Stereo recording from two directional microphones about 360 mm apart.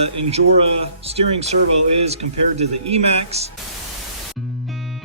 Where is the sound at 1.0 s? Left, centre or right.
Centre.